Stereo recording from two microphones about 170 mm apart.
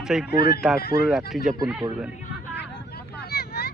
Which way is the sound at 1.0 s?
Centre (ahead or behind).